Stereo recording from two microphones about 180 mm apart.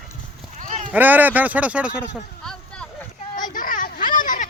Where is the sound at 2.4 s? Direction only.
5° left (ahead or behind).